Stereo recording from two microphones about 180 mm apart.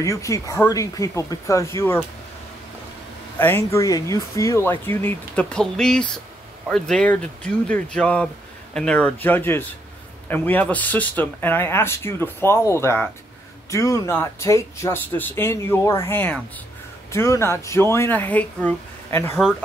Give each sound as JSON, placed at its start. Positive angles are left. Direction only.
{"t": 0.0, "sound": "speech", "side_deg": 15}
{"t": 3.3, "sound": "speech", "side_deg": 10}